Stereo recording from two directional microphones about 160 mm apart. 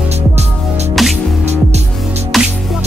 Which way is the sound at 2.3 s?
Centre (ahead or behind).